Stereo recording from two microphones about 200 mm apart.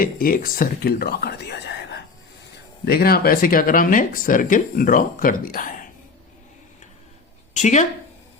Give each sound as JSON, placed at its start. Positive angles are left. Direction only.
{"t": 0.0, "sound": "speech", "side_deg": 45}
{"t": 7.5, "sound": "a woman's voice", "side_deg": 35}